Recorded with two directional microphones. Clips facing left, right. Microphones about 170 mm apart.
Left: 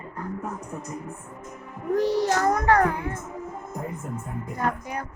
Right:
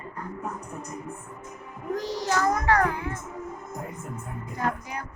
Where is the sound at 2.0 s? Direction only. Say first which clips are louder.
Left 5 dB; 60° left (ahead or behind).